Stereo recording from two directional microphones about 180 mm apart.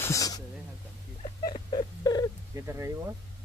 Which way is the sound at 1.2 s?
30° left (ahead or behind).